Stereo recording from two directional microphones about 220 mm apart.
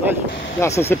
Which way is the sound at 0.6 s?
10° left (ahead or behind).